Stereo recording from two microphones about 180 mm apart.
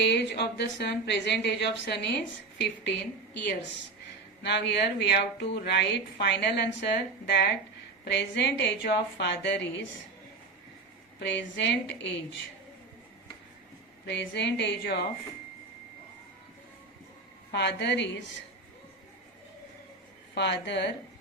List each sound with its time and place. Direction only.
0.0 s a woman's voice: 70° left (ahead or behind)
11.2 s a woman's voice: 75° left (ahead or behind)
14.0 s a woman's voice: 70° left (ahead or behind)
17.5 s a woman's voice: 70° left (ahead or behind)
20.3 s a woman's voice: 75° left (ahead or behind)